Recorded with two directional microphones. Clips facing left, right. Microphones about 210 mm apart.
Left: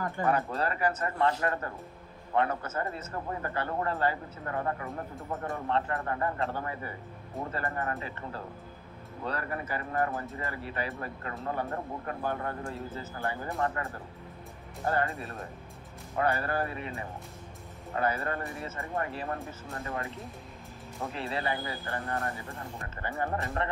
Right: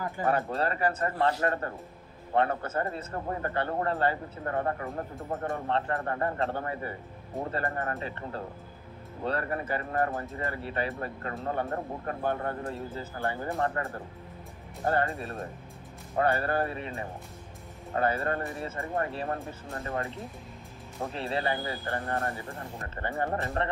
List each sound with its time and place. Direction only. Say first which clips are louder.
0.2 s speech: right 1 dB; 30° right (ahead or behind)
14.9 s speech: right 2 dB; 30° right (ahead or behind)
21.0 s speech: right 3 dB; 30° right (ahead or behind)